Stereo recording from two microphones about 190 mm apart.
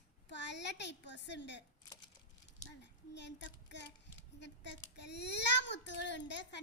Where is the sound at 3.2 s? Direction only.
65° left (ahead or behind).